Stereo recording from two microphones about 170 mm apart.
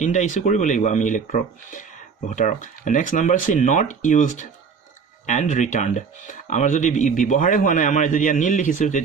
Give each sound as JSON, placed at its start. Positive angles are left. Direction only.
{"t": 0.0, "sound": "speech", "side_deg": 45}